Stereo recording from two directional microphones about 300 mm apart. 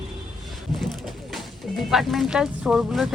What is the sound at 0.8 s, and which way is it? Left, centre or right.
Speech, centre.